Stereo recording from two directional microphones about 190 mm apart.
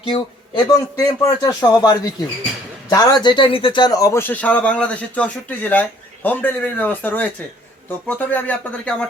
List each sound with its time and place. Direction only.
0.0 s a man's voice: 25° left (ahead or behind); by 9.0 s 5° left (ahead or behind)